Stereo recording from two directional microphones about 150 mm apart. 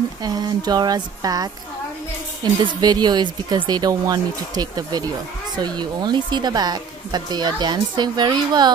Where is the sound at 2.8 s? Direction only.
30° right (ahead or behind).